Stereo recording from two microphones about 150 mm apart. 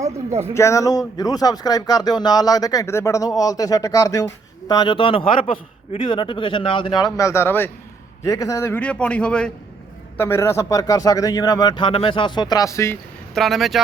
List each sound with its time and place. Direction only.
0.5 s a man's voice: 20° left (ahead or behind)
13.3 s speech: centre (ahead or behind)